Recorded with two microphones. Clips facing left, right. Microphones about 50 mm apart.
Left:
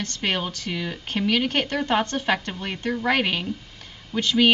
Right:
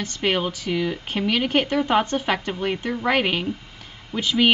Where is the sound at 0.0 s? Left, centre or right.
Centre.